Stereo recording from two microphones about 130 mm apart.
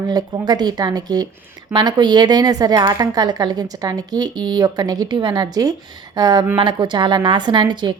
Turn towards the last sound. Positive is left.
turn(degrees=-35)  # may be behind; listen again after turning